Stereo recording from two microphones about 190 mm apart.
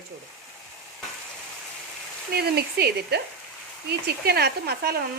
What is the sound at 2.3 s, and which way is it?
Speech, 55° right (ahead or behind).